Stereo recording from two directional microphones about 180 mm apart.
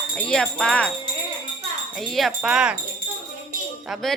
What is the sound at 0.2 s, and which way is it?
Speech, 5° left (ahead or behind).